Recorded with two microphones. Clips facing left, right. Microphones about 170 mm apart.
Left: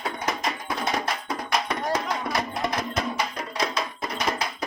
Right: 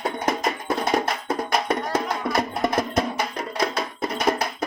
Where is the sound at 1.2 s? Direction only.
50° right (ahead or behind).